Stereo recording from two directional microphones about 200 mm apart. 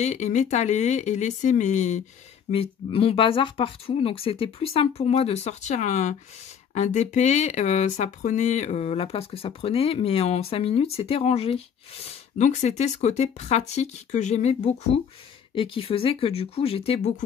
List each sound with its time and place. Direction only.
0.0 s speech: 35° left (ahead or behind)